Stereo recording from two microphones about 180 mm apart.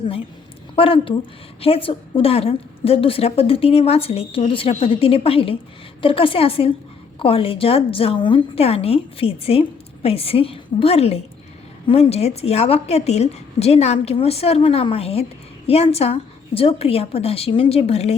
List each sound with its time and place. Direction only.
0.8 s a woman's voice: 30° left (ahead or behind)